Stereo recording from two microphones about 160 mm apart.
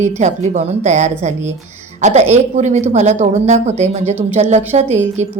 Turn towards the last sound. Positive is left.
turn(degrees=-45)  # may be behind; listen again after turning